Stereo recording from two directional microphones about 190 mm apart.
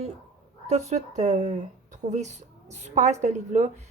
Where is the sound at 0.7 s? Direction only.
35° right (ahead or behind).